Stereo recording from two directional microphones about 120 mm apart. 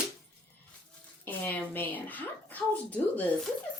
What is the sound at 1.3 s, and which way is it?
Speech, 15° left (ahead or behind).